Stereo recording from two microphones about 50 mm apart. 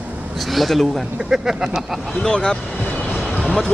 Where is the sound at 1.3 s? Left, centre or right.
Centre.